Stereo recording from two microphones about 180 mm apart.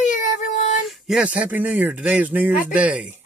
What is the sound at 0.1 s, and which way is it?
Child singing, 45° left (ahead or behind).